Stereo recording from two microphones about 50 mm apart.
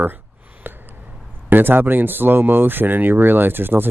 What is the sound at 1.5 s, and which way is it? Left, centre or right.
Speech, right.